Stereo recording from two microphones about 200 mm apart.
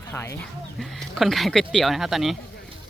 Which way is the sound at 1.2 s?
Centre (ahead or behind).